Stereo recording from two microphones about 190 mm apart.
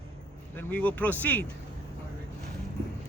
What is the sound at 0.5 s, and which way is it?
Speech, 10° left (ahead or behind).